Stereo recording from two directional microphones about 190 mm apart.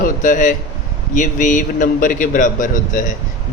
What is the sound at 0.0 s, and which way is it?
A man's voice, 45° left (ahead or behind).